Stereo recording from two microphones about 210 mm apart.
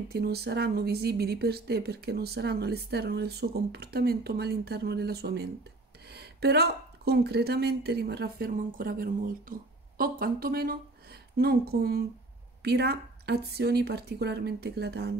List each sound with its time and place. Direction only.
0.1 s a woman's voice: 50° right (ahead or behind)